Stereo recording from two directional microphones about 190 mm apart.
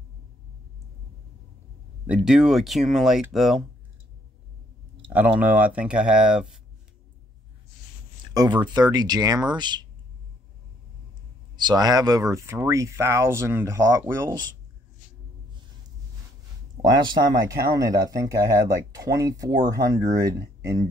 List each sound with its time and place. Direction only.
2.0 s speech: 5° right (ahead or behind)
5.1 s speech: 10° right (ahead or behind)
8.3 s speech: 20° right (ahead or behind)
11.5 s speech: 20° right (ahead or behind)
16.8 s speech: 25° right (ahead or behind)